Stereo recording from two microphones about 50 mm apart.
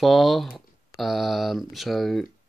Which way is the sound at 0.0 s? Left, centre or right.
Centre.